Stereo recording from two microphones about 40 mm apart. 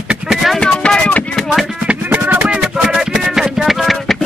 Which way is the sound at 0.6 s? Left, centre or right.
Left.